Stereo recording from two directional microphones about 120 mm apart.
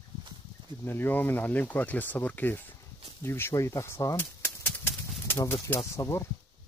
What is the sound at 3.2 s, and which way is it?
Bird flight, 20° left (ahead or behind).